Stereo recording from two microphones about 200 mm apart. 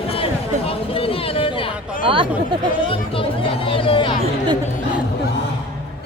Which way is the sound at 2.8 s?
25° left (ahead or behind).